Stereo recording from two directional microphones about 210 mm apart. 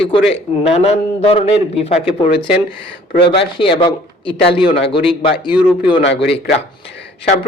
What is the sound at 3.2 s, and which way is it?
A man's voice, 25° left (ahead or behind).